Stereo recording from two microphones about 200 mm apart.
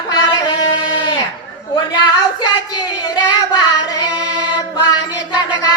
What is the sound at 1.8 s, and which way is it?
Child singing, 20° left (ahead or behind).